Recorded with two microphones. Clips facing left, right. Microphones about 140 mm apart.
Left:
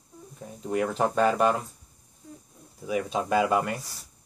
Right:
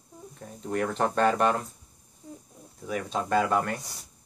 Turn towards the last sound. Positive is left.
turn(degrees=10)  # may be behind; listen again after turning